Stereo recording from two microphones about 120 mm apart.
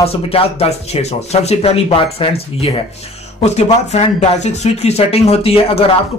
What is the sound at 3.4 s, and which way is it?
Speech, 70° left (ahead or behind).